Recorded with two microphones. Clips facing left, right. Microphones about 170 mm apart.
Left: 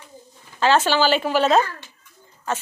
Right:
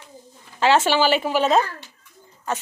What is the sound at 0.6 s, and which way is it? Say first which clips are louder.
Speech: even; 25° right (ahead or behind).